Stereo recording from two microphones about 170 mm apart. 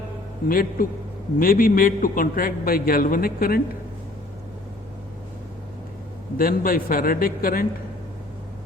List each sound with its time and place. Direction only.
0.4 s a man's voice: 55° left (ahead or behind)
6.3 s a man's voice: 60° left (ahead or behind)